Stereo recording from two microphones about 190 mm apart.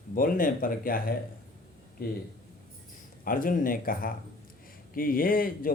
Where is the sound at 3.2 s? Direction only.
45° left (ahead or behind).